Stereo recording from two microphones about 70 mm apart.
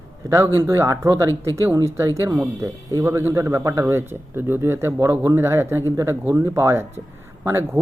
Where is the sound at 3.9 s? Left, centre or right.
Right.